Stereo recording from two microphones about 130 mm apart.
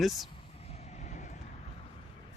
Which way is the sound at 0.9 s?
75° left (ahead or behind).